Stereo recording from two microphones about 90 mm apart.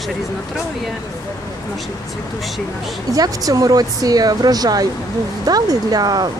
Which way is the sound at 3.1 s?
45° right (ahead or behind).